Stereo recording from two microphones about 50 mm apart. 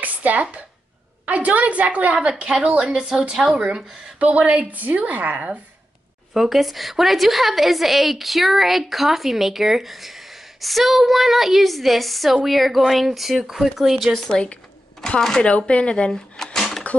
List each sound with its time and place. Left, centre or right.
0.0 s a woman's voice: right
2.8 s a woman's voice: centre; by 5.6 s right
6.3 s a woman's voice: centre
14.3 s speech: left
15.1 s speech: centre
15.4 s speech: left
16.5 s a sound: centre